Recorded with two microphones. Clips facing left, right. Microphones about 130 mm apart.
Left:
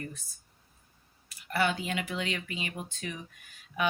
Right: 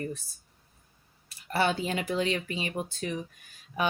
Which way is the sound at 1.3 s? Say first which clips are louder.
Right 2 dB; 30° right (ahead or behind).